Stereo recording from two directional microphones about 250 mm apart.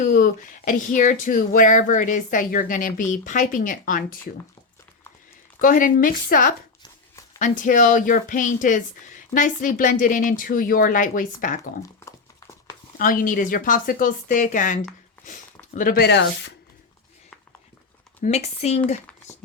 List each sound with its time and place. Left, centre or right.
0.0 s speech: left
5.5 s speech: left
11.8 s a sound: centre
13.0 s speech: left
18.2 s speech: left